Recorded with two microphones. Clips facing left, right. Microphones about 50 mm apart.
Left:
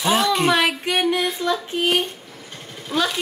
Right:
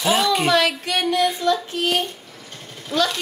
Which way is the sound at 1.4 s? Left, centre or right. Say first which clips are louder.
Right 1 dB; centre.